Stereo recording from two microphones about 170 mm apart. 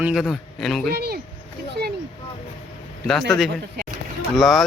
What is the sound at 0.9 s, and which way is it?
Speech, 70° right (ahead or behind).